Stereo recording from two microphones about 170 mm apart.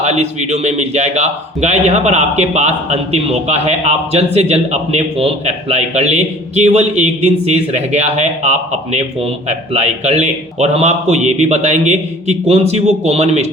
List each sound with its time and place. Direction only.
0.0 s a man's voice: 40° right (ahead or behind)